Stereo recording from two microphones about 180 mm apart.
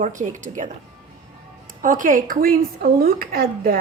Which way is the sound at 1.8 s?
45° right (ahead or behind).